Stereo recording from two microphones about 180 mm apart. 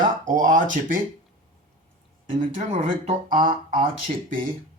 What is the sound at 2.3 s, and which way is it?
Speech, 45° right (ahead or behind).